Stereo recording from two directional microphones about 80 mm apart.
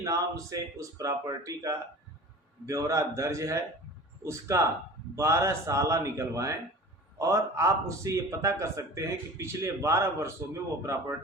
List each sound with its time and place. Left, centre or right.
0.0 s speech: right